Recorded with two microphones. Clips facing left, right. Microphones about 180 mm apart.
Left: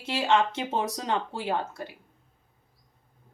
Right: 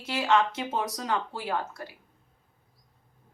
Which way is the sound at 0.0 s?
30° left (ahead or behind).